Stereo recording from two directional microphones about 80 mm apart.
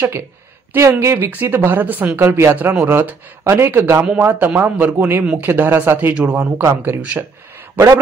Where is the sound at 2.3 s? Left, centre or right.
Right.